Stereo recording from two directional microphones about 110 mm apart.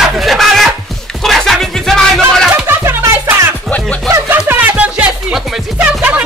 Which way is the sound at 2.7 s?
20° right (ahead or behind).